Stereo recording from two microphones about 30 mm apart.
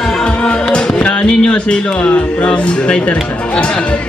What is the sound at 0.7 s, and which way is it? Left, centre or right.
Music, left.